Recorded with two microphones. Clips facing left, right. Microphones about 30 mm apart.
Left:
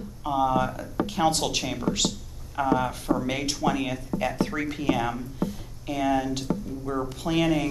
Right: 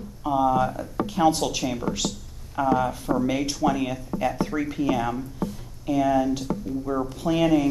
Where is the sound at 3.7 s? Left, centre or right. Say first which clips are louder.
Even; left.